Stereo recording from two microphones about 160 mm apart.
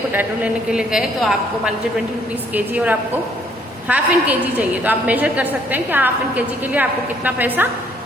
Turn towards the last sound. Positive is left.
turn(degrees=-10)  # may be behind; listen again after turning